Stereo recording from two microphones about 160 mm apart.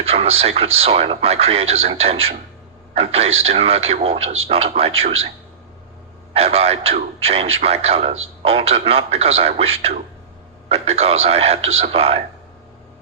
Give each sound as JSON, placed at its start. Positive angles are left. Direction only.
{"t": 0.0, "sound": "speech", "side_deg": -40}
{"t": 6.3, "sound": "speech", "side_deg": -40}